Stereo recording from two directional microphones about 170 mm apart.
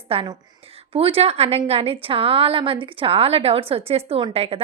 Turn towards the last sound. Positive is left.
turn(degrees=-35)  # may be behind; listen again after turning